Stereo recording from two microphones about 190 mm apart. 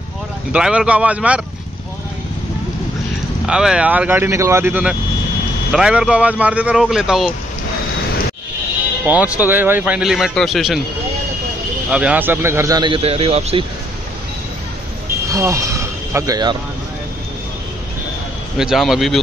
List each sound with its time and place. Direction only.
0.5 s speech: 5° right (ahead or behind)
3.4 s a man's voice: 5° right (ahead or behind)
9.0 s speech: 10° right (ahead or behind)
11.9 s a man's voice: 5° right (ahead or behind); by 13.7 s 30° right (ahead or behind)
15.2 s speech: 15° right (ahead or behind)
18.6 s a man's voice: centre (ahead or behind)